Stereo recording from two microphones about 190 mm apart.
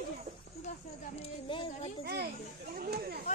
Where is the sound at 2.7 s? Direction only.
55° right (ahead or behind).